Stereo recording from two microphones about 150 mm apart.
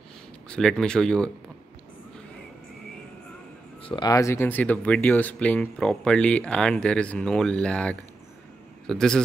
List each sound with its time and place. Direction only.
0.5 s speech: 5° left (ahead or behind)
3.8 s a man's voice: 30° left (ahead or behind); by 9.2 s 5° left (ahead or behind)